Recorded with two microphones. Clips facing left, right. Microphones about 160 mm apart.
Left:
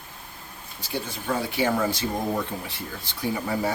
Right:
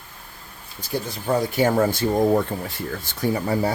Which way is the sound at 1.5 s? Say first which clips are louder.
Right 4 dB; 45° right (ahead or behind).